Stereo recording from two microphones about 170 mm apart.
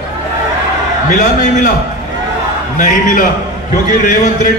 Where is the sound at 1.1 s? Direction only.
50° left (ahead or behind).